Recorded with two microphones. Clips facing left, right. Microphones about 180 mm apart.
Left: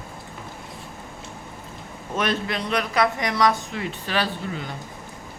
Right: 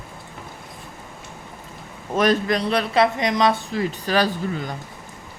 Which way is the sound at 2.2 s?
40° right (ahead or behind).